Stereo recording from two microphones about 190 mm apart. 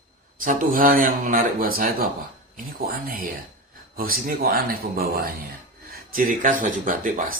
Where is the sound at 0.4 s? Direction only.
45° right (ahead or behind).